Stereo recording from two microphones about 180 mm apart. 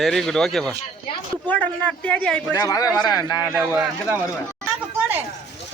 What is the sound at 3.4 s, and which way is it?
Speech, 10° right (ahead or behind).